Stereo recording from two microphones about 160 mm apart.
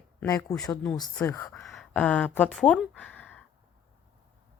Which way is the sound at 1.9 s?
10° left (ahead or behind).